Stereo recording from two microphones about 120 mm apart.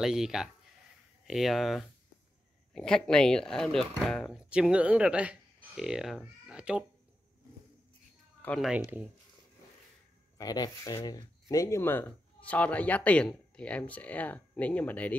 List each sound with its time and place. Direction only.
0.0 s speech: 5° right (ahead or behind)
4.4 s speech: 10° right (ahead or behind)
8.5 s speech: 5° right (ahead or behind)
10.3 s speech: 30° left (ahead or behind); by 15.1 s 15° left (ahead or behind)